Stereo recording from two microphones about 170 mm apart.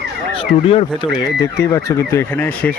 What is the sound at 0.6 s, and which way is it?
Speech, 35° left (ahead or behind).